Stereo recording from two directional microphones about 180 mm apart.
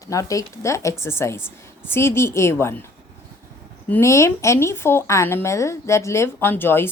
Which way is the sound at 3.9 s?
15° left (ahead or behind).